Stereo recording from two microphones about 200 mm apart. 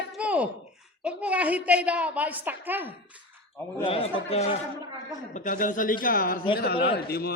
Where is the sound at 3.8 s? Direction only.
25° left (ahead or behind).